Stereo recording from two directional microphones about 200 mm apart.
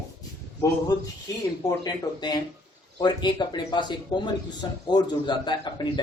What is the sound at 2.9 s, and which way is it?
A man's voice, 20° left (ahead or behind).